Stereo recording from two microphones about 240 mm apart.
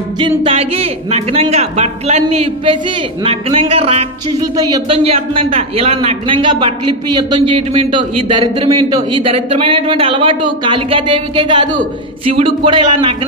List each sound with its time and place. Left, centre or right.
0.2 s speech: right